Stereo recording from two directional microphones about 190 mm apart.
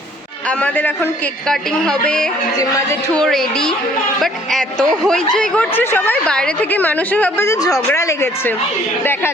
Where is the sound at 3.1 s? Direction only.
5° left (ahead or behind).